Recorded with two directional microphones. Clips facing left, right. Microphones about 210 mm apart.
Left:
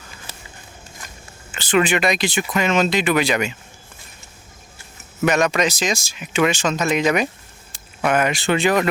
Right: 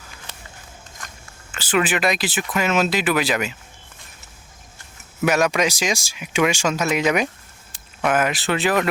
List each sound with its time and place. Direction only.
0.3 s a sound: 5° left (ahead or behind)
1.5 s speech: 5° right (ahead or behind)
5.2 s speech: 5° right (ahead or behind)